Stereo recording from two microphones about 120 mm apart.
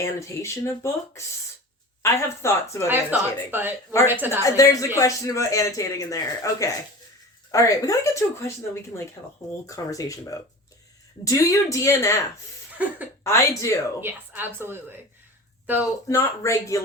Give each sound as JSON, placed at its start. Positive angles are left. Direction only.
{"t": 0.0, "sound": "speech", "side_deg": 25}
{"t": 2.9, "sound": "a woman's voice", "side_deg": -15}
{"t": 4.4, "sound": "speech", "side_deg": 25}
{"t": 9.6, "sound": "speech", "side_deg": 30}
{"t": 12.8, "sound": "a woman's voice", "side_deg": -15}
{"t": 13.2, "sound": "speech", "side_deg": 25}
{"t": 14.0, "sound": "a woman's voice", "side_deg": -15}
{"t": 15.8, "sound": "speech", "side_deg": 25}